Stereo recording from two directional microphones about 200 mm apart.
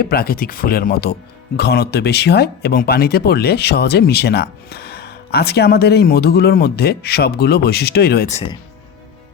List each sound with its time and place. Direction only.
0.0 s speech: 50° left (ahead or behind)
8.3 s speech: 30° left (ahead or behind)